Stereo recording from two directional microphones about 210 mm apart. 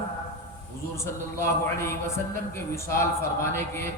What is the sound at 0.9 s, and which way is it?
A man's voice, 15° left (ahead or behind).